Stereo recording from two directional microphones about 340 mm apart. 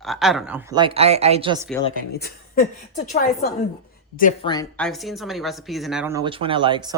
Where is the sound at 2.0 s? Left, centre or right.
Left.